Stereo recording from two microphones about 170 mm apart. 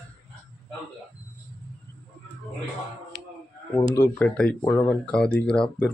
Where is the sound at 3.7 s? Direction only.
15° left (ahead or behind).